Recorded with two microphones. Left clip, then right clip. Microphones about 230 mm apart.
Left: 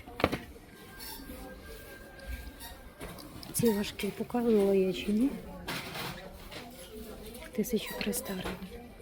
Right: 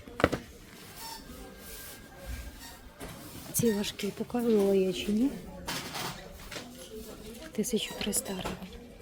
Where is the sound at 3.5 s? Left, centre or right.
Centre.